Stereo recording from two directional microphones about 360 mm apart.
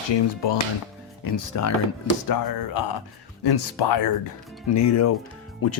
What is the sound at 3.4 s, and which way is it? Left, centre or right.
Speech, left.